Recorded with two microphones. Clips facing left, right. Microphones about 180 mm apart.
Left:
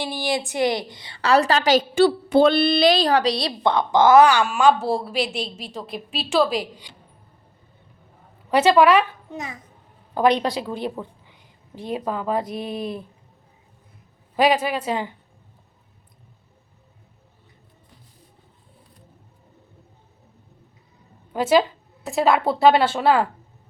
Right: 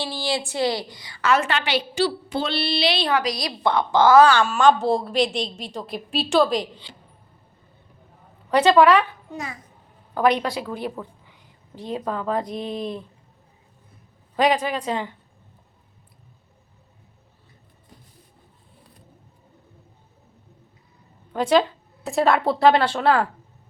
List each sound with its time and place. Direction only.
0.0 s a woman's voice: 20° left (ahead or behind)
3.7 s a woman's voice: 20° left (ahead or behind)
8.4 s a woman's voice: 15° left (ahead or behind)
14.3 s speech: 10° left (ahead or behind)
21.3 s a woman's voice: 5° left (ahead or behind)